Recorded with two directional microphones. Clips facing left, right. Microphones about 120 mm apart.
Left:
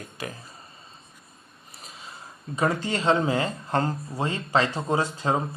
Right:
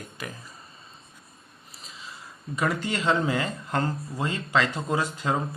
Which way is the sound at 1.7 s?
55° left (ahead or behind).